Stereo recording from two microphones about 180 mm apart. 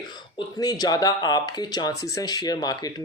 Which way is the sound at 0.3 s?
20° left (ahead or behind).